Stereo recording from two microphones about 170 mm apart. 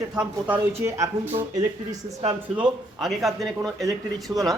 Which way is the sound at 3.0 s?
Centre (ahead or behind).